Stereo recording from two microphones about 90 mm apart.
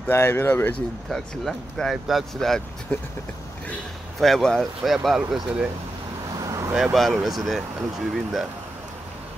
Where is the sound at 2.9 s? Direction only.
20° left (ahead or behind).